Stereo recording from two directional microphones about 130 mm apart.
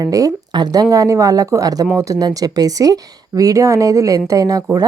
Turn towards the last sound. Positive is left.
turn(degrees=-30)  # may be behind; listen again after turning